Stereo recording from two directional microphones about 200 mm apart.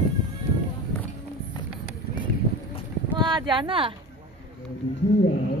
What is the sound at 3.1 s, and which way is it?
Speech, 20° right (ahead or behind).